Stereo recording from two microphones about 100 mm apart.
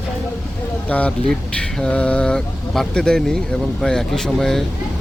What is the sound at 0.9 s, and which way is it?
Speech, 15° left (ahead or behind).